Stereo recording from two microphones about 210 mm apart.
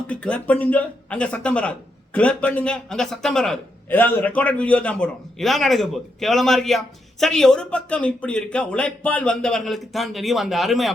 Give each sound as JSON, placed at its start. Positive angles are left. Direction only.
{"t": 0.1, "sound": "a man's voice", "side_deg": 5}